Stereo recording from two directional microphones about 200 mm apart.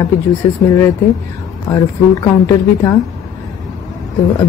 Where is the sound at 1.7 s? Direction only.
15° left (ahead or behind).